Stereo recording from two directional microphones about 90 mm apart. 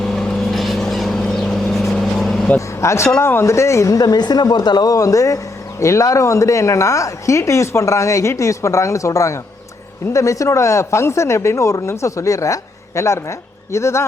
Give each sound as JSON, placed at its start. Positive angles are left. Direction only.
{"t": 0.0, "sound": "vehicle", "side_deg": 5}
{"t": 2.6, "sound": "speech", "side_deg": 30}